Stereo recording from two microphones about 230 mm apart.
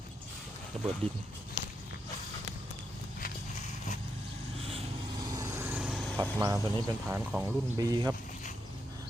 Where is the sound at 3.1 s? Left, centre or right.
Left.